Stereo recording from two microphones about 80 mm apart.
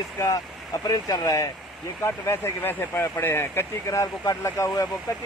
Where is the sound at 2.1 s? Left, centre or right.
Left.